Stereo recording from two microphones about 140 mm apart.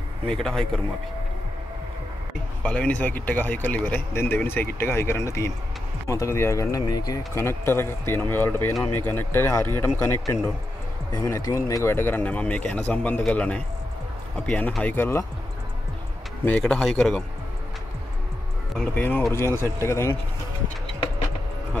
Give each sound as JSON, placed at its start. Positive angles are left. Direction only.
{"t": 0.3, "sound": "speech", "side_deg": 5}
{"t": 2.6, "sound": "speech", "side_deg": 10}
{"t": 16.4, "sound": "speech", "side_deg": 10}
{"t": 18.8, "sound": "speech", "side_deg": 10}